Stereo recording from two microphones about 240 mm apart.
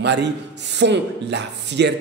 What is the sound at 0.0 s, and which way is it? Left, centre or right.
A man's voice, right.